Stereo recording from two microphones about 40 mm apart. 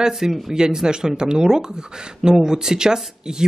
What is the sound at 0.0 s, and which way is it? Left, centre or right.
Speech, centre.